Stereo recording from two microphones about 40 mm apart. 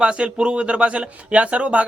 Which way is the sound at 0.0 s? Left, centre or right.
Right.